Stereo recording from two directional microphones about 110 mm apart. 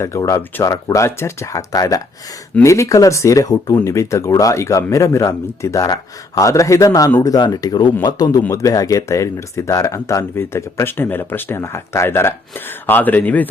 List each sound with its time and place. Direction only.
0.0 s speech: 25° left (ahead or behind)